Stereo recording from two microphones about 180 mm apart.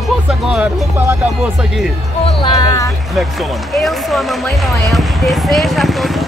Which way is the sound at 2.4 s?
20° left (ahead or behind).